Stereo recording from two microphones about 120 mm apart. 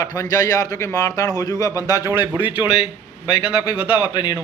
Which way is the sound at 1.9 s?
20° right (ahead or behind).